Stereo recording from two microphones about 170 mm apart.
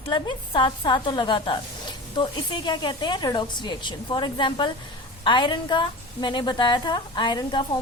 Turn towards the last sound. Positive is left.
turn(degrees=25)  # may be behind; listen again after turning